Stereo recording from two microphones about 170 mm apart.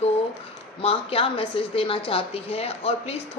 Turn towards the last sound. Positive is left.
turn(degrees=35)  # may be behind; listen again after turning